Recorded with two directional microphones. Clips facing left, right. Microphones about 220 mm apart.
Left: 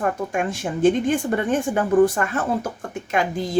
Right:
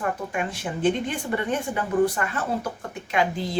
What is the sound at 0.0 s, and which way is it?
Speech, 45° left (ahead or behind).